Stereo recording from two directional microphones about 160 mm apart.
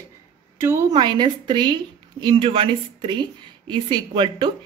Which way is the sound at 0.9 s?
30° right (ahead or behind).